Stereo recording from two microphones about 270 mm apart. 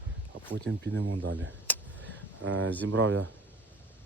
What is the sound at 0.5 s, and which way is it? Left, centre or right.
Speech, right.